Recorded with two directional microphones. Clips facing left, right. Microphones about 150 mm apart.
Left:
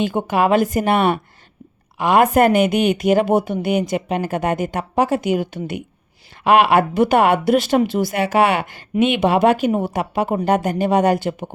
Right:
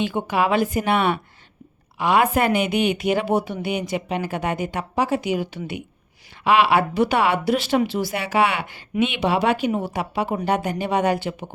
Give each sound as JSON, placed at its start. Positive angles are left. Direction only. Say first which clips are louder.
{"t": 0.0, "sound": "a woman's voice", "louder": "left 4 dB", "side_deg": 45}